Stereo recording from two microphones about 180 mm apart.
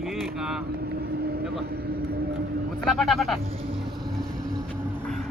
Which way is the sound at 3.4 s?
30° right (ahead or behind).